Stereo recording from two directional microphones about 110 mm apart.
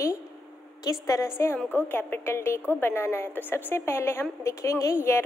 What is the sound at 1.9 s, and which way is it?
A woman's voice, 20° left (ahead or behind).